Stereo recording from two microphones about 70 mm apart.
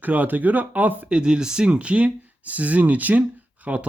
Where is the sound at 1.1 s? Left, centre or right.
Centre.